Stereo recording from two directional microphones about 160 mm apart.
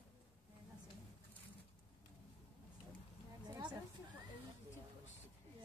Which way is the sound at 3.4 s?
25° right (ahead or behind).